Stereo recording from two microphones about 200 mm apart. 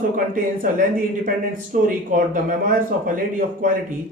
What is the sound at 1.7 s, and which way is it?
Speech, 40° right (ahead or behind).